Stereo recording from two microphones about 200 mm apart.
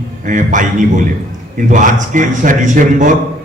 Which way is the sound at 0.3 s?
40° right (ahead or behind).